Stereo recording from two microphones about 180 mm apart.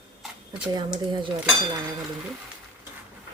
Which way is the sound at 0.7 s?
25° right (ahead or behind).